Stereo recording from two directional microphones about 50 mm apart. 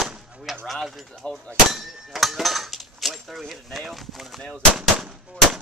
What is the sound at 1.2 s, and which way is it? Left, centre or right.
Speech, left.